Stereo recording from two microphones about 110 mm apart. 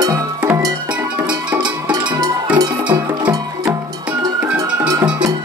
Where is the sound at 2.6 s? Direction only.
35° right (ahead or behind).